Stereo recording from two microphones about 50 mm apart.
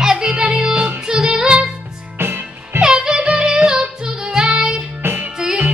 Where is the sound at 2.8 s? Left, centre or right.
Centre.